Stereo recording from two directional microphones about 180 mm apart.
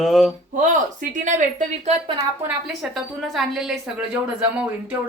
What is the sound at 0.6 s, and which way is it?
Speech, 45° right (ahead or behind).